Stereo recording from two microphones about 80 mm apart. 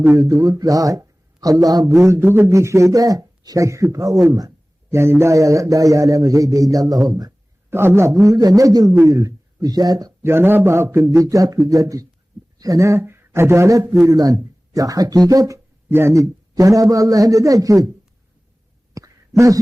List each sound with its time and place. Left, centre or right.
0.2 s speech: right
2.0 s a man's voice: right
2.2 s a man's voice: right
2.5 s speech: right
4.9 s a man's voice: right
7.7 s a man's voice: right
10.2 s a man's voice: right
11.1 s a man's voice: right
13.0 s a man's voice: right
15.9 s a man's voice: right
18.9 s a sound: right